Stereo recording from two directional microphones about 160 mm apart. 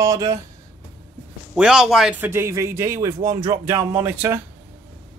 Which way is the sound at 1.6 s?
5° right (ahead or behind).